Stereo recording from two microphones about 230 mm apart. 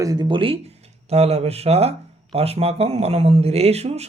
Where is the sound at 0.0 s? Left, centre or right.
Centre.